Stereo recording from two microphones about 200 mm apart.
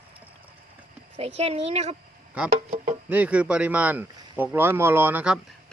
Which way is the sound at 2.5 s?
45° right (ahead or behind).